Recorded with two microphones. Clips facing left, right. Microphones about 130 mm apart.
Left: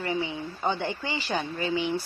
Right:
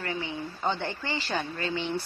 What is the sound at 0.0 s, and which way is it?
A woman's voice, 15° left (ahead or behind).